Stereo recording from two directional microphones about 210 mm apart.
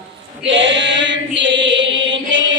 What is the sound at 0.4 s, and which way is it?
Chant, 60° right (ahead or behind).